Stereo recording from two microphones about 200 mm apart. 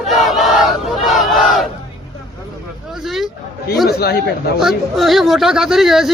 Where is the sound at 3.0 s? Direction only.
Centre (ahead or behind).